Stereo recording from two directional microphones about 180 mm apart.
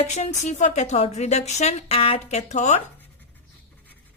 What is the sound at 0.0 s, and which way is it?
Speech, 40° left (ahead or behind).